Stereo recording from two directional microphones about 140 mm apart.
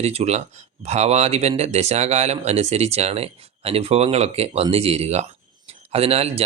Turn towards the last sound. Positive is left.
turn(degrees=-45)  # may be behind; listen again after turning